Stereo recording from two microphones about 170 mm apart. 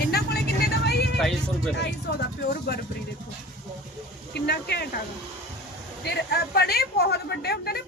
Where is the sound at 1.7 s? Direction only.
80° left.